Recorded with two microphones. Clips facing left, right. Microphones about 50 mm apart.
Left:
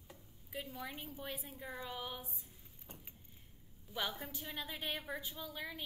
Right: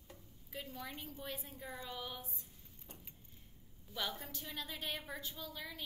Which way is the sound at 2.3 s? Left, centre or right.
Centre.